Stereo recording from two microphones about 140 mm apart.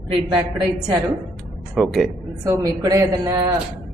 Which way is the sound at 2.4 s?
25° right (ahead or behind).